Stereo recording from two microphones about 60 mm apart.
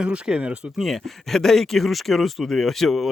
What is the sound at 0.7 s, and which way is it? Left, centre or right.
A man's voice, centre.